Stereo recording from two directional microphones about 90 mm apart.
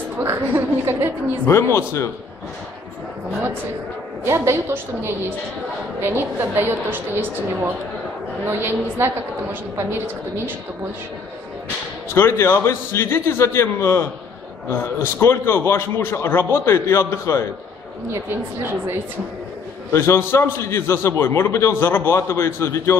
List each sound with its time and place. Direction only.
0.2 s a woman's voice: 30° right (ahead or behind)
1.5 s a man's voice: 30° left (ahead or behind)
4.2 s a woman's voice: 30° right (ahead or behind)
12.1 s a man's voice: 30° left (ahead or behind)
19.9 s a man's voice: 30° left (ahead or behind)